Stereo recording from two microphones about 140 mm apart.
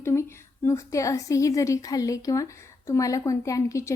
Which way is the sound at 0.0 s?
20° left (ahead or behind).